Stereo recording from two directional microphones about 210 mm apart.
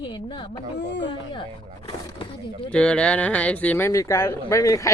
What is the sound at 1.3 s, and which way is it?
Speech, 25° left (ahead or behind).